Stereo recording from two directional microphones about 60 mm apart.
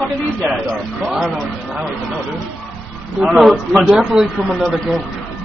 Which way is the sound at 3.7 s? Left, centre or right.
Centre.